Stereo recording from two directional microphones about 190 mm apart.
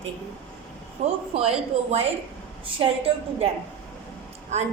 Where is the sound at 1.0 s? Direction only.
35° right (ahead or behind).